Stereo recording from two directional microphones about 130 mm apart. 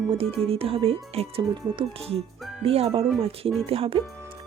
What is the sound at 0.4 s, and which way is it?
Speech, 45° right (ahead or behind).